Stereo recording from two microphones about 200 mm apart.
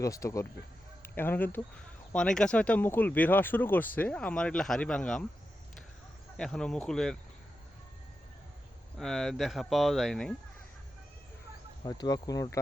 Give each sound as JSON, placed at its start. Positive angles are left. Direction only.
{"t": 0.0, "sound": "speech", "side_deg": 15}
{"t": 6.3, "sound": "speech", "side_deg": 5}
{"t": 9.0, "sound": "speech", "side_deg": 0}
{"t": 11.8, "sound": "speech", "side_deg": 20}